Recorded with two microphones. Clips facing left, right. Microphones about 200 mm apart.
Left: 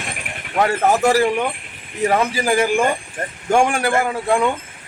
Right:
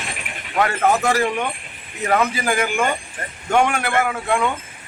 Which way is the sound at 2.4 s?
30° left (ahead or behind).